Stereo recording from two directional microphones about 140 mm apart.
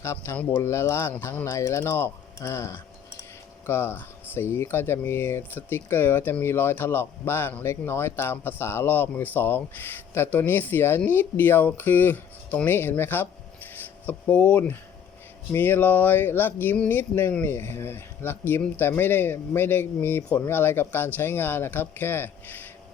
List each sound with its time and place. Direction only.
0.0 s speech: 20° left (ahead or behind)